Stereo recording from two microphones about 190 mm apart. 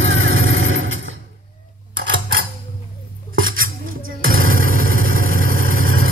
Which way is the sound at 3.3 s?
90° right.